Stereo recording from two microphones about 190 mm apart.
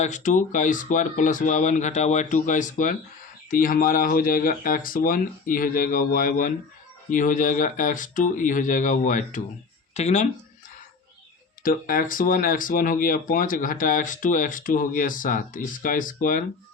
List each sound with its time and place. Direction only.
0.0 s speech: 40° left (ahead or behind)
11.6 s speech: 45° left (ahead or behind)